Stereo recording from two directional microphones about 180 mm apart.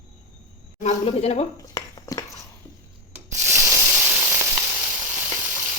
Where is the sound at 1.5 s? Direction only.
20° left (ahead or behind).